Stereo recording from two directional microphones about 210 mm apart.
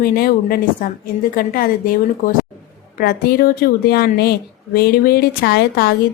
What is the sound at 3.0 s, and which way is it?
Speech, 45° left (ahead or behind).